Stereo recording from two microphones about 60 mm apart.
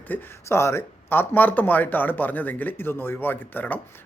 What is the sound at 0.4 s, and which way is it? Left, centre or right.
Speech, left.